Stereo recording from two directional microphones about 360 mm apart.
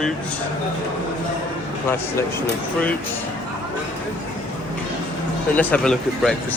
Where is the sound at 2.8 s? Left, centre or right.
Centre.